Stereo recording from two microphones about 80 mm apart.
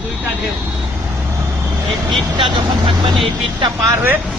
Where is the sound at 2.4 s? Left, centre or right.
Right.